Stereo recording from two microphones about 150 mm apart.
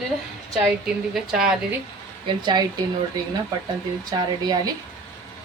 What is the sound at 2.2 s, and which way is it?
Speech, 30° right (ahead or behind).